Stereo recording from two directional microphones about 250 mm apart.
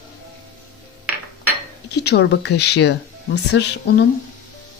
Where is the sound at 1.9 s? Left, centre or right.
Left.